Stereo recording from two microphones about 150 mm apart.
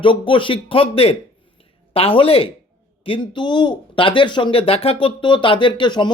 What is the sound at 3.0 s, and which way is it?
A man's voice, 35° left (ahead or behind).